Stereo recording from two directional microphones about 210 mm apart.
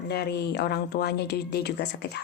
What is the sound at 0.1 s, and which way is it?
Speech, 50° left (ahead or behind).